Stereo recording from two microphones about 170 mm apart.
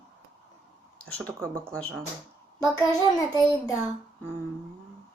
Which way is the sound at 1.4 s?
15° right (ahead or behind).